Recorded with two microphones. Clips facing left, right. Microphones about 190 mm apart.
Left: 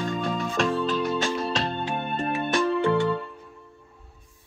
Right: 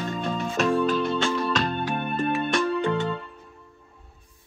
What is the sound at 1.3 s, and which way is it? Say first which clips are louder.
Music: right 2 dB; 30° left (ahead or behind).